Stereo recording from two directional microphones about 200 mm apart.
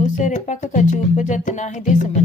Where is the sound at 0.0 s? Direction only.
40° left (ahead or behind).